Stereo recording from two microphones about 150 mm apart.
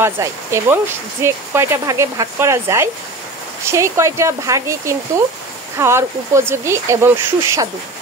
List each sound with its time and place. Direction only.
0.0 s speech: 15° right (ahead or behind)